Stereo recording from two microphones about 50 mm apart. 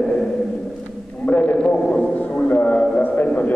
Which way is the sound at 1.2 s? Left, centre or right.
Left.